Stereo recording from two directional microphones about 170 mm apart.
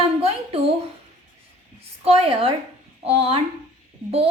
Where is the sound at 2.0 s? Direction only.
35° right (ahead or behind).